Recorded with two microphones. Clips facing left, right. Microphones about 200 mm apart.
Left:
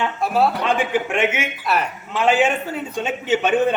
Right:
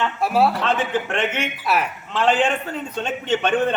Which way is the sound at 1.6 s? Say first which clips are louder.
Even; 5° right (ahead or behind).